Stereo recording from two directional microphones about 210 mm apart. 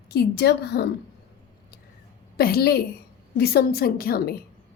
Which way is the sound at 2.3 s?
45° left (ahead or behind).